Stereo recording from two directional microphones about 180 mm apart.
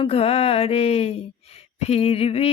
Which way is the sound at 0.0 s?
35° left (ahead or behind).